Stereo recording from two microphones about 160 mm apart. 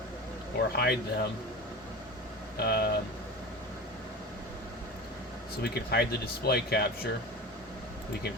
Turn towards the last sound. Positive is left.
turn(degrees=90)